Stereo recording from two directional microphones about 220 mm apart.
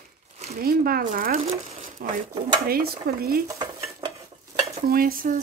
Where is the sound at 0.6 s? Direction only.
40° right (ahead or behind).